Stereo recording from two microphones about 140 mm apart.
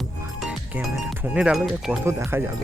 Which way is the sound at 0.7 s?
10° right (ahead or behind).